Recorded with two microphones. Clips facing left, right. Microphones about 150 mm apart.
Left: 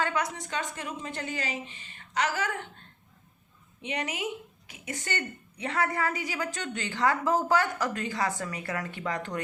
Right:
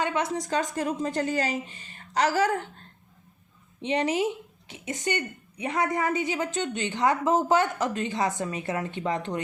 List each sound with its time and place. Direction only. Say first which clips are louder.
0.0 s a woman's voice: right 3 dB; 25° right (ahead or behind)
4.7 s a woman's voice: right 6 dB; 20° right (ahead or behind)